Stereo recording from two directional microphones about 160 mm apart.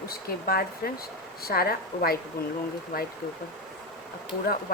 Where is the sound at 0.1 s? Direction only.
70° left (ahead or behind).